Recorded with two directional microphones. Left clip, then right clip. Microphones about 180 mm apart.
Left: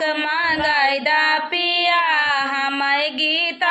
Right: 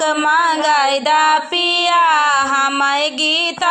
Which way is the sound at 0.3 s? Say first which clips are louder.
Right 7 dB; 20° right (ahead or behind).